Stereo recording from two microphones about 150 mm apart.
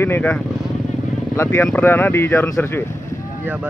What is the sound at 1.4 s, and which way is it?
Speech, 10° left (ahead or behind).